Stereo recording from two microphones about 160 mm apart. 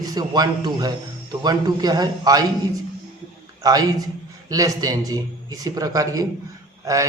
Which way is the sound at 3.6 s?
20° right (ahead or behind).